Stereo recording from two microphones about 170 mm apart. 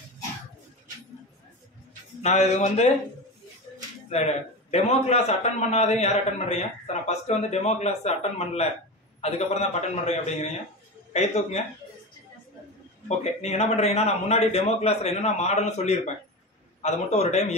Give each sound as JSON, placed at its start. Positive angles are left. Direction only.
{"t": 2.2, "sound": "a man's voice", "side_deg": 40}
{"t": 4.1, "sound": "a man's voice", "side_deg": 40}
{"t": 13.2, "sound": "a man's voice", "side_deg": 40}